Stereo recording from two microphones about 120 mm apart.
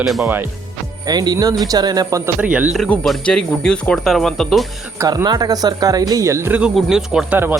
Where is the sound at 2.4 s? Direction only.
10° right (ahead or behind).